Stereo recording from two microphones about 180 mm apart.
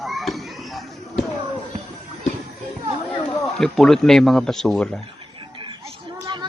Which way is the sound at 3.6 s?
Centre (ahead or behind).